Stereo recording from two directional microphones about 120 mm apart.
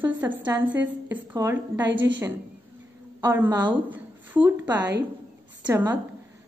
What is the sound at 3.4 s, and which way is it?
A woman's voice, 35° right (ahead or behind).